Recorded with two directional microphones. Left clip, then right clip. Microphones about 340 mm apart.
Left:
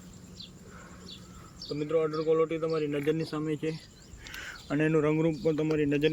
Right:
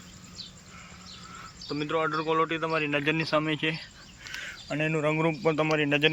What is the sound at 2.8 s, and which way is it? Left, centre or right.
Speech, right.